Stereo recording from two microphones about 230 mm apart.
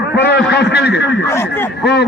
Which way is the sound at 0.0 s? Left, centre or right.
Left.